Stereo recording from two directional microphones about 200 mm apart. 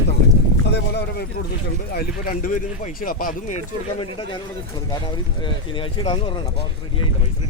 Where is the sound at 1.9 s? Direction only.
45° left (ahead or behind).